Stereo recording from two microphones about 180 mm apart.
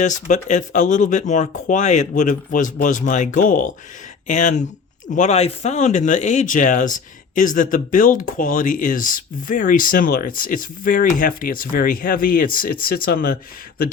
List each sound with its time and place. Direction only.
0.0 s speech: 45° left (ahead or behind)